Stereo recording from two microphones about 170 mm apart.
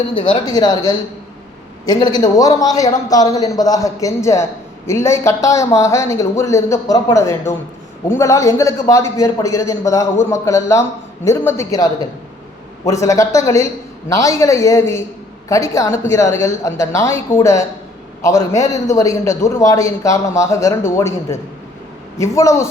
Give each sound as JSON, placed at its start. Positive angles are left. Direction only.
{"t": 0.2, "sound": "a man's voice", "side_deg": 25}